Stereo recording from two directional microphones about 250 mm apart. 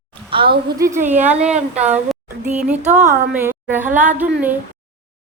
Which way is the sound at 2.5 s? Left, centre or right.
Centre.